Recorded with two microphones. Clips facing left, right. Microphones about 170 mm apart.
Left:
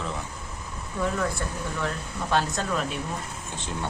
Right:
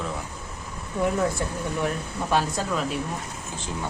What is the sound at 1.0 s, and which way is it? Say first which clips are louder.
Speech: right 4 dB; 15° right (ahead or behind).